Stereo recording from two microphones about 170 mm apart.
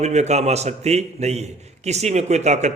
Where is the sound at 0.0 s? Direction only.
40° right (ahead or behind).